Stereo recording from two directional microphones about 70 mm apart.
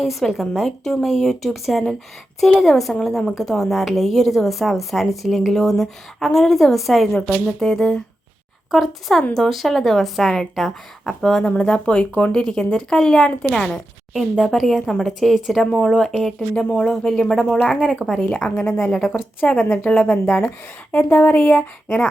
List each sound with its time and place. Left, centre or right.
0.0 s a woman's voice: centre
7.1 s a woman's voice: centre
16.6 s a woman's voice: centre